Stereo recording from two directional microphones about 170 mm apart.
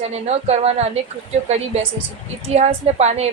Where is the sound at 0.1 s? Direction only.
40° right (ahead or behind).